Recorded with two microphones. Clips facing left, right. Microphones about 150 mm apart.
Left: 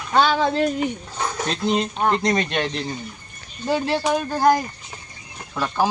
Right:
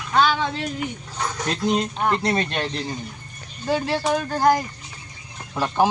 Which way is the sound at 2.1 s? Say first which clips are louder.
Left 2 dB; 5° right (ahead or behind).